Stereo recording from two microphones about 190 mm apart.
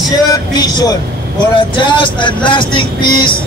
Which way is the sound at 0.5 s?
20° left (ahead or behind).